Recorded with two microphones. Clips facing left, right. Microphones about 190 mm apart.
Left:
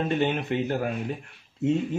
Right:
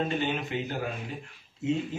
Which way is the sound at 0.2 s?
60° left (ahead or behind).